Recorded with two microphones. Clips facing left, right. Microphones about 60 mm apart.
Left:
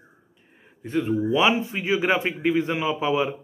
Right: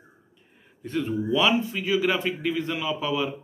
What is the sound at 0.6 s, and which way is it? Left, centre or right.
Speech, centre.